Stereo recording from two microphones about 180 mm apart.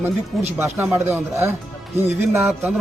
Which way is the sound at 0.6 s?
15° right (ahead or behind).